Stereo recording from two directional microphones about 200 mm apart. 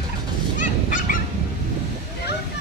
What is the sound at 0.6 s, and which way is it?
Dog, 40° left (ahead or behind).